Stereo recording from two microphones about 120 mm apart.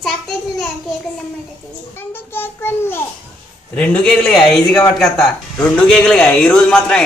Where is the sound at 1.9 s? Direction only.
20° left (ahead or behind).